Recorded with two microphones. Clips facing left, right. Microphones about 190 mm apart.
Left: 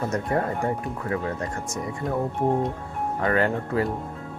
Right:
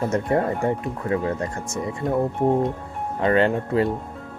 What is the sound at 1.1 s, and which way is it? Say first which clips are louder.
Speech: right 5 dB; 20° right (ahead or behind).